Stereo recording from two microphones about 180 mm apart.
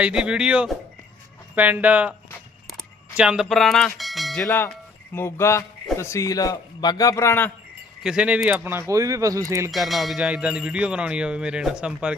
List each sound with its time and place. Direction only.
0.0 s speech: 5° right (ahead or behind)
3.2 s speech: 5° right (ahead or behind)
4.4 s a man's voice: 15° left (ahead or behind)
8.0 s speech: 5° right (ahead or behind)
9.7 s speech: centre (ahead or behind)